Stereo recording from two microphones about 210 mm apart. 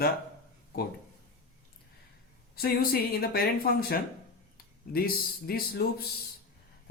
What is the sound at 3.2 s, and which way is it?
Speech, 45° left (ahead or behind).